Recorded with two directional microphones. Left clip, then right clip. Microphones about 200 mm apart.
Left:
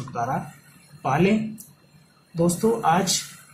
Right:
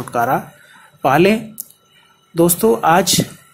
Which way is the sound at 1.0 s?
35° right (ahead or behind).